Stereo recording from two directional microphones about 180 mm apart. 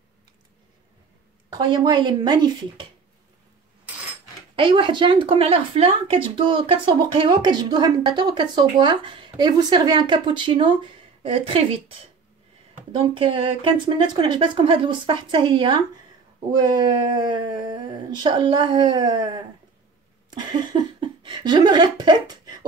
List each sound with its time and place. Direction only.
1.5 s speech: 25° right (ahead or behind)
4.6 s speech: 25° right (ahead or behind)
12.9 s speech: 30° right (ahead or behind)
20.2 s a sound: 25° right (ahead or behind)